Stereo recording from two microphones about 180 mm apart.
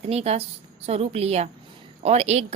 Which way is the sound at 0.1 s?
35° right (ahead or behind).